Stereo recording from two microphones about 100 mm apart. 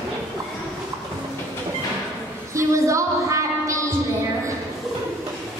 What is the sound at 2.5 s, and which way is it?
Music, 30° right (ahead or behind).